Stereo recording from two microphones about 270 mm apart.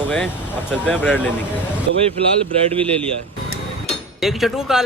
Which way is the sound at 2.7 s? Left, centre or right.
Right.